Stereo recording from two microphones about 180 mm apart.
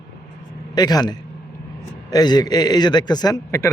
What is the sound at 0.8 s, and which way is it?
A man's voice, 20° left (ahead or behind).